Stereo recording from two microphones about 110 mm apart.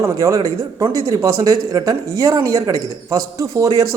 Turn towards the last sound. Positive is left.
turn(degrees=-30)  # may be behind; listen again after turning